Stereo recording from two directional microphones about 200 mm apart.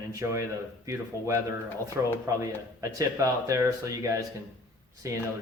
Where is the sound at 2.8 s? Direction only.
15° right (ahead or behind).